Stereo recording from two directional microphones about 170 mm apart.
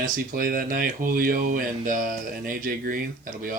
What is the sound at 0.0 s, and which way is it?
Speech, 55° right (ahead or behind).